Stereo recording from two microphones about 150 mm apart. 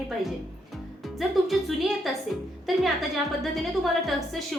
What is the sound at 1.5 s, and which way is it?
A woman's voice, centre (ahead or behind).